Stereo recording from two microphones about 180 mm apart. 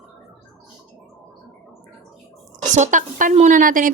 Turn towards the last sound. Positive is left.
turn(degrees=-50)  # may be behind; listen again after turning